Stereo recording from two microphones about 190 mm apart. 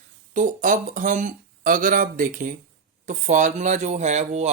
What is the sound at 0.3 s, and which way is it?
Speech, 45° right (ahead or behind).